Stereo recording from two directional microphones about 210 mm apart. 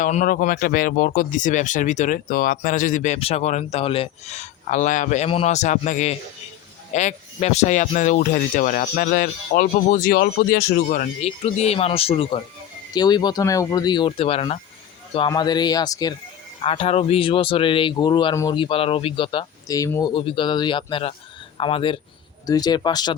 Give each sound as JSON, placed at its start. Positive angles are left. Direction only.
{"t": 0.0, "sound": "speech", "side_deg": 35}